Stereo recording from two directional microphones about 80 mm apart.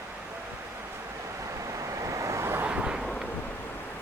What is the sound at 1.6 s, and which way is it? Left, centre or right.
Vehicle, right.